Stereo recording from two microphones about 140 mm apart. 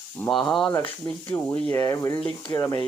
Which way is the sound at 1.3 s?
20° left (ahead or behind).